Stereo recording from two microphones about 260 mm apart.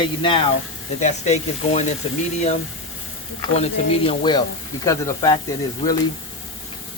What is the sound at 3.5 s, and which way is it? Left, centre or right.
Speech, left.